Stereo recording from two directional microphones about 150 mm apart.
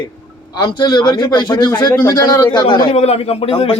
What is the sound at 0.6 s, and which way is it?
A man's voice, 30° left (ahead or behind).